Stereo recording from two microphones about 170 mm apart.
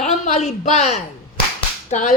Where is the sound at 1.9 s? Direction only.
45° left (ahead or behind).